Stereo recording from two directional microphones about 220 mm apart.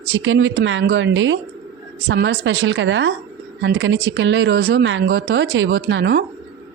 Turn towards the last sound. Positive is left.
turn(degrees=-50)  # may be behind; listen again after turning